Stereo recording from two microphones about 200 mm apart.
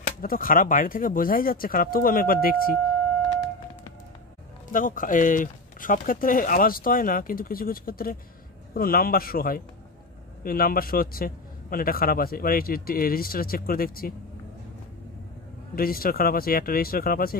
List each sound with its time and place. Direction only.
0.2 s a man's voice: 45° left (ahead or behind)
4.7 s a man's voice: 40° left (ahead or behind)
15.7 s a man's voice: 45° left (ahead or behind)